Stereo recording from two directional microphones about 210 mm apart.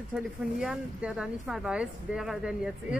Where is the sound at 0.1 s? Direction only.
5° right (ahead or behind).